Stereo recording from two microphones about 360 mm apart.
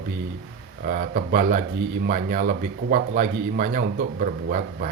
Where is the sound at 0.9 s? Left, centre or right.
Right.